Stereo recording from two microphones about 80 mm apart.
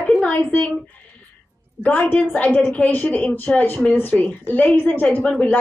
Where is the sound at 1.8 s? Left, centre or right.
Centre.